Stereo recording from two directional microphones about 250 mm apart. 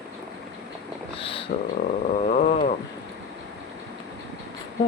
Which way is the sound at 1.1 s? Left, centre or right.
Left.